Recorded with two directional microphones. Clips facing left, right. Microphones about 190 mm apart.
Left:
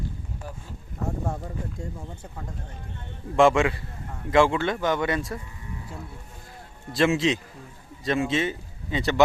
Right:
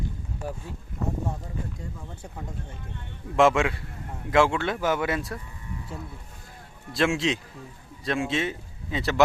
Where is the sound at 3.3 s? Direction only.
Centre (ahead or behind).